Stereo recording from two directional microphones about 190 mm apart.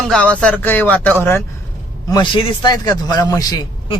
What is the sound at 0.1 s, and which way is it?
Speech, 5° left (ahead or behind).